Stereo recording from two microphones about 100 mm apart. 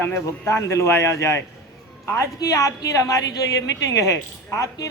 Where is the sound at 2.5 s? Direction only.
30° left (ahead or behind).